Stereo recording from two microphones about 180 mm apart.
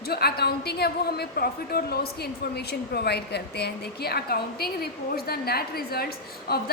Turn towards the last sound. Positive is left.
turn(degrees=60)  # may be behind; listen again after turning